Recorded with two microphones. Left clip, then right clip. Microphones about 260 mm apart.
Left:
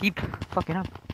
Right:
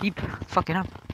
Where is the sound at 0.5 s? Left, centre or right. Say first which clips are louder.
Right 4 dB; right.